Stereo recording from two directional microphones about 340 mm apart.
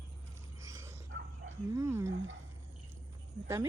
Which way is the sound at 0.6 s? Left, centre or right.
Centre.